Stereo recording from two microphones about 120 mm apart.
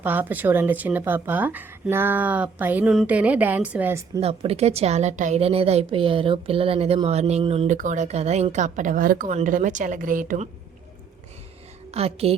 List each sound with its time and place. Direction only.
0.0 s speech: 15° right (ahead or behind)
4.2 s a woman's voice: 55° right (ahead or behind)
7.7 s a woman's voice: 90° right
11.9 s a woman's voice: 55° right (ahead or behind)